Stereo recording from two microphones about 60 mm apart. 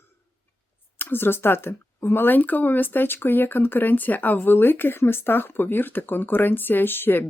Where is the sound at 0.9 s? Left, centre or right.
Left.